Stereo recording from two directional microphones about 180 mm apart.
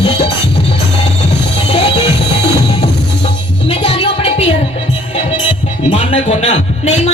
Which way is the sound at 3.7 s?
30° left (ahead or behind).